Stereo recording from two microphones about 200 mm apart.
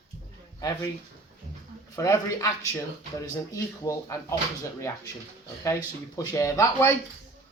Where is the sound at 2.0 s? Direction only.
15° left (ahead or behind).